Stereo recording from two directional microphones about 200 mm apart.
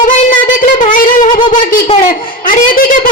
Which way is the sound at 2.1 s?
45° left (ahead or behind).